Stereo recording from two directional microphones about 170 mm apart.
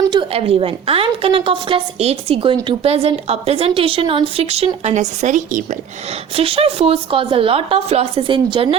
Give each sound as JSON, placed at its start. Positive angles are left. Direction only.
{"t": 0.1, "sound": "a woman's voice", "side_deg": -30}
{"t": 6.3, "sound": "a woman's voice", "side_deg": -35}